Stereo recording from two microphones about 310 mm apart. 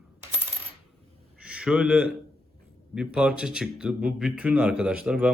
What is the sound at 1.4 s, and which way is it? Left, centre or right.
A man's voice, centre.